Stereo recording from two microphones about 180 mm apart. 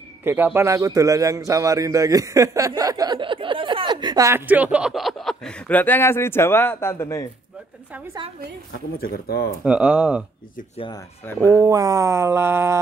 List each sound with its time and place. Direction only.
0.2 s a man's voice: 10° right (ahead or behind); by 7.2 s 15° left (ahead or behind)
8.9 s speech: 55° left (ahead or behind)
9.7 s a man's voice: 10° right (ahead or behind)
11.5 s a man's voice: 20° right (ahead or behind)